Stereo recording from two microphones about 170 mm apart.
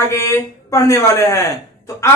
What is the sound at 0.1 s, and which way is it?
A man's voice, 20° left (ahead or behind).